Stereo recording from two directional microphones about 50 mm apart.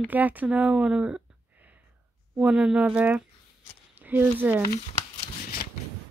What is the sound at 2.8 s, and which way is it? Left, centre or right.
Speech, right.